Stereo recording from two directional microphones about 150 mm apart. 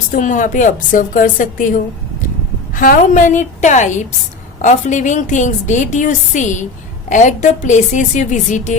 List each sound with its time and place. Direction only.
0.1 s a woman's voice: 60° left (ahead or behind)